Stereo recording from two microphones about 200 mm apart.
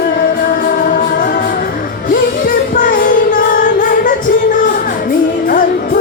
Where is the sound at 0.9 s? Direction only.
45° left (ahead or behind).